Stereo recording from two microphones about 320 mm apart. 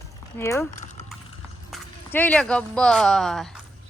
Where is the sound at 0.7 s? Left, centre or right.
Left.